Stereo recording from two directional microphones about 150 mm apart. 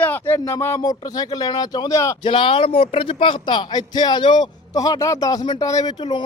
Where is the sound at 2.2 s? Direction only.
35° left (ahead or behind).